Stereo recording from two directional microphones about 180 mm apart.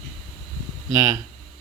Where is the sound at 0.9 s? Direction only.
15° right (ahead or behind).